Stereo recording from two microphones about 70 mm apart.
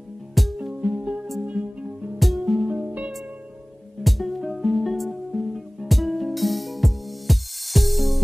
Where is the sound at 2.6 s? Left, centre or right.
Centre.